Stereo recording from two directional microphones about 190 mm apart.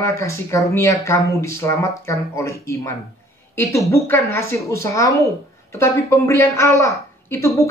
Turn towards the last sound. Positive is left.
turn(degrees=15)  # may be behind; listen again after turning